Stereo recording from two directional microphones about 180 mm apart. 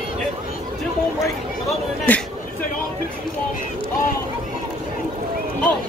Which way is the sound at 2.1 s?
10° left (ahead or behind).